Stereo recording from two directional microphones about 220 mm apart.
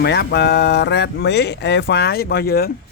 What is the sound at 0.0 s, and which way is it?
Speech, 50° left (ahead or behind).